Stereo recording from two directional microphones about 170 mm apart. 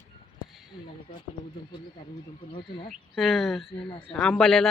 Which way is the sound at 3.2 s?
Centre (ahead or behind).